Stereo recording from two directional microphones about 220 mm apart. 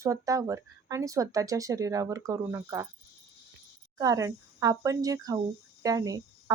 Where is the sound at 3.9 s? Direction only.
15° right (ahead or behind).